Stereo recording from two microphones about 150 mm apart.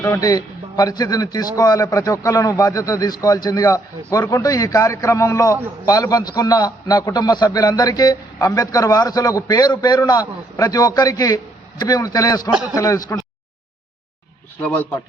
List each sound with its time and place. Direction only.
0.0 s a man's voice: 20° left (ahead or behind)
14.6 s speech: 10° left (ahead or behind)